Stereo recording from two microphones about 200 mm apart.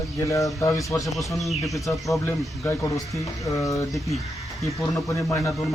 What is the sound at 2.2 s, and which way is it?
Speech, 15° left (ahead or behind).